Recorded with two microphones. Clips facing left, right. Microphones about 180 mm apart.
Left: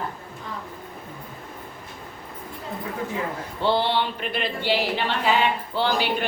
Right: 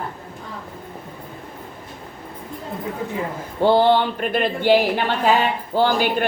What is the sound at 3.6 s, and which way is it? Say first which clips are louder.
Speech: right 7 dB; 45° right (ahead or behind).